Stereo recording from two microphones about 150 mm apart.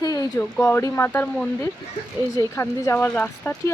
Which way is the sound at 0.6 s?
10° left (ahead or behind).